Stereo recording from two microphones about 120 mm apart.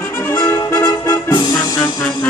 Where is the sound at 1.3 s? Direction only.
35° left (ahead or behind).